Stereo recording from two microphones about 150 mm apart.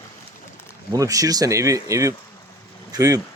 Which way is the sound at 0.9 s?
20° right (ahead or behind).